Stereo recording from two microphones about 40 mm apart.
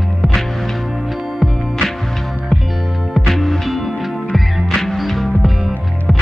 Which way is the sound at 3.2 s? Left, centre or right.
Centre.